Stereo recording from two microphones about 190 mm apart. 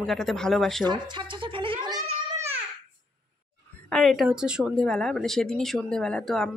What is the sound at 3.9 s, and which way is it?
A woman's voice, centre (ahead or behind).